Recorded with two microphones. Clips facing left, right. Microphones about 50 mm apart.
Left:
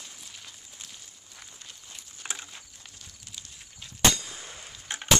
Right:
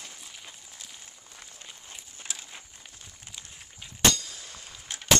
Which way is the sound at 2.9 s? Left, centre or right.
Right.